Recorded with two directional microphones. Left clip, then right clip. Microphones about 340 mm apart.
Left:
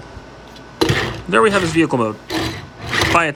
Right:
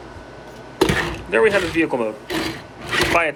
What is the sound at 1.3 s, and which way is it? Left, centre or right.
Speech, centre.